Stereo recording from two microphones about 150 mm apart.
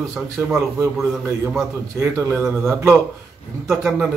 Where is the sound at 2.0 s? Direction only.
15° right (ahead or behind).